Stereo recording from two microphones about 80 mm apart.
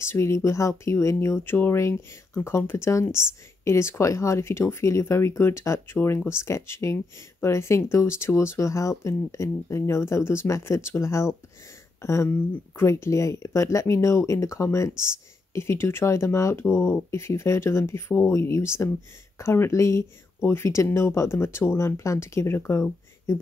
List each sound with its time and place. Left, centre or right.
0.0 s speech: left